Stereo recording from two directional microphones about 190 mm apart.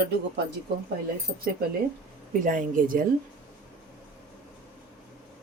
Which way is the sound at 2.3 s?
45° right (ahead or behind).